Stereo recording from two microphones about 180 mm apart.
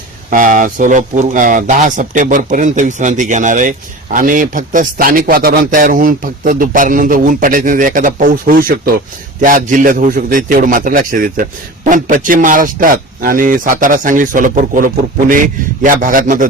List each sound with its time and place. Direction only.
0.3 s speech: 50° right (ahead or behind)